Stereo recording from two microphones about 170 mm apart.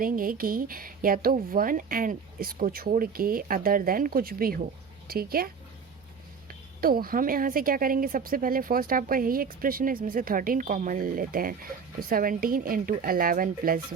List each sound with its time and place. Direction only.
0.0 s speech: 55° right (ahead or behind)
6.5 s speech: 60° right (ahead or behind)